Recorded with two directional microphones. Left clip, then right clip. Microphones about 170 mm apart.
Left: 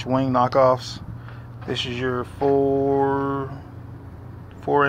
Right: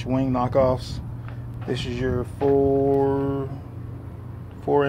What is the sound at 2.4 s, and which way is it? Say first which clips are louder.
Speech: even; 5° left (ahead or behind).